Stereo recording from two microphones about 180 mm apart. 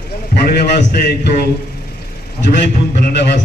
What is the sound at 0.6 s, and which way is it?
Speech, 60° left (ahead or behind).